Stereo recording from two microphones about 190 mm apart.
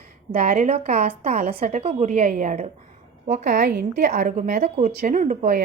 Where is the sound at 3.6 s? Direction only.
60° right (ahead or behind).